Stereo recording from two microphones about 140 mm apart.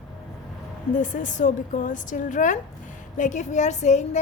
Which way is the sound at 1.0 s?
65° left (ahead or behind).